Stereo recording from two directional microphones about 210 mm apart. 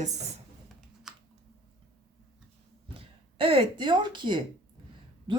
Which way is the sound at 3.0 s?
25° right (ahead or behind).